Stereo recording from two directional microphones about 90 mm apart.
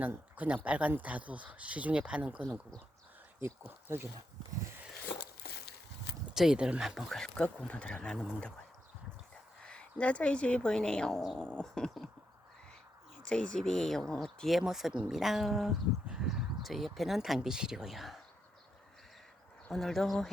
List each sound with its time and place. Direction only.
0.0 s speech: 15° right (ahead or behind)
3.4 s speech: 25° right (ahead or behind)
6.2 s speech: 5° right (ahead or behind)
9.6 s speech: 15° left (ahead or behind)
13.2 s speech: 10° left (ahead or behind)
19.7 s speech: 5° left (ahead or behind)